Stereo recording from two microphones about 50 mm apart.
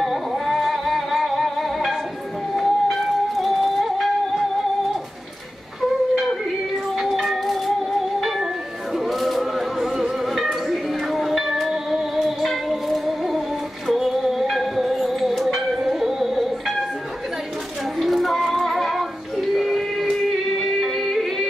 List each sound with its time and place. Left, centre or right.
0.0 s music: centre
7.0 s music: centre
8.9 s a sound: centre
10.3 s music: centre
17.9 s child singing: centre
19.5 s a sound: centre
20.8 s music: centre